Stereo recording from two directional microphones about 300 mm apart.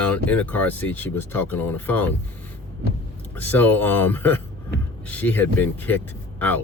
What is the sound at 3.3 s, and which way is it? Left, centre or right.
Speech, centre.